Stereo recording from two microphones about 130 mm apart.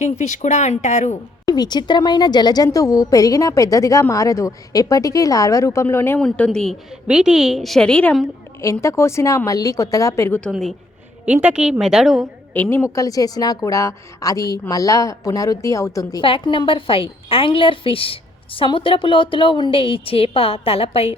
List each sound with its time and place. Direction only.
0.0 s speech: 65° left (ahead or behind)
1.5 s a woman's voice: 30° left (ahead or behind)
6.1 s a woman's voice: 5° left (ahead or behind)
8.6 s a woman's voice: 20° left (ahead or behind)
10.5 s a woman's voice: centre (ahead or behind)
11.3 s a woman's voice: 10° right (ahead or behind)
12.5 s a woman's voice: 15° left (ahead or behind)
16.2 s a woman's voice: 40° left (ahead or behind)